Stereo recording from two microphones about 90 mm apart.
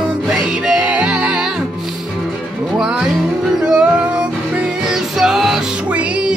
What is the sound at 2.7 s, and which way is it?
Music, 10° right (ahead or behind).